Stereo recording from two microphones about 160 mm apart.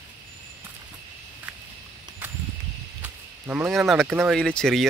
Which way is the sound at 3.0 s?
10° right (ahead or behind).